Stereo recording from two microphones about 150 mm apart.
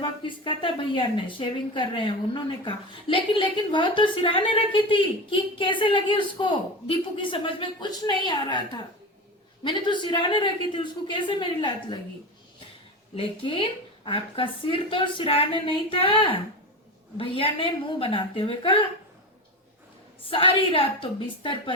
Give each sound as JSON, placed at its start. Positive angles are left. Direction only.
{"t": 0.0, "sound": "speech", "side_deg": 35}
{"t": 13.1, "sound": "speech", "side_deg": 35}
{"t": 20.3, "sound": "speech", "side_deg": 35}